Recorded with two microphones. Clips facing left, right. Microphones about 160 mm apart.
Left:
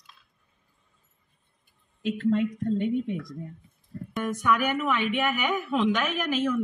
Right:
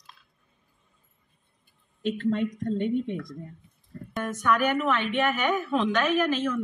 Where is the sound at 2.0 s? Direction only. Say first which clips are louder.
Left 1 dB; 5° left (ahead or behind).